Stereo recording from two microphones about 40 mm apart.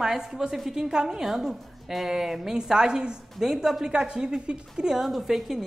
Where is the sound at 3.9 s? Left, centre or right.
Centre.